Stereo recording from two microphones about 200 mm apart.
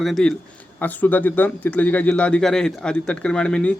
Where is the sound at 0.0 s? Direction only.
Centre (ahead or behind).